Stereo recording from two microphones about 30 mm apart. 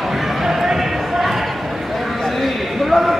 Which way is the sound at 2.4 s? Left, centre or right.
Centre.